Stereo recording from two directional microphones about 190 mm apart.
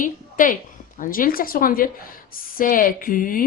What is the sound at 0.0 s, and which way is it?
A woman's voice, 45° left (ahead or behind).